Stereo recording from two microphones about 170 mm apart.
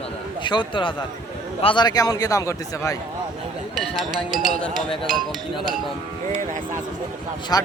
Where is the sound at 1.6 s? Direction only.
30° left (ahead or behind).